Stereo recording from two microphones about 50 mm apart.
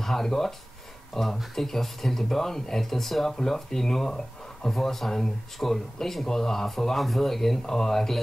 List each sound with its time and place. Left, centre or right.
0.0 s speech: centre